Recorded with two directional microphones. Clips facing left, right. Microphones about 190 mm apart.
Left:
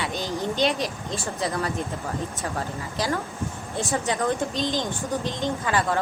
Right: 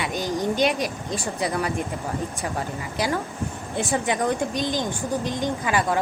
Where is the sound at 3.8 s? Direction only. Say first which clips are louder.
Right 2 dB; 15° right (ahead or behind).